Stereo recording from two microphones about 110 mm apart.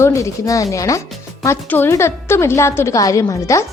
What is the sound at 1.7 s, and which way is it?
A woman's voice, 20° left (ahead or behind).